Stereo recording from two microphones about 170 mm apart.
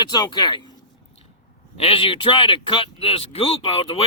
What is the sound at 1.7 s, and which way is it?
Speech, 35° left (ahead or behind).